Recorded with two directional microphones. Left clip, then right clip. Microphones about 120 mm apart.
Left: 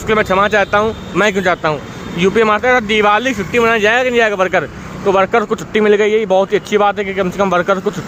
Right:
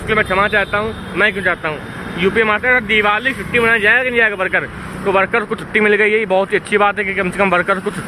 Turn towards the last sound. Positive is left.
turn(degrees=20)  # may be behind; listen again after turning